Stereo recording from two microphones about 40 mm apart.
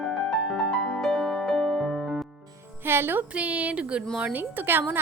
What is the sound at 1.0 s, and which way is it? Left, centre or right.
Music, centre.